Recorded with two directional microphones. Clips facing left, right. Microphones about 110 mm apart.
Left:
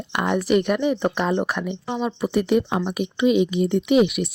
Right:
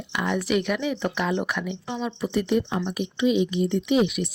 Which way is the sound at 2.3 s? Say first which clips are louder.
Left 3 dB; 65° left (ahead or behind).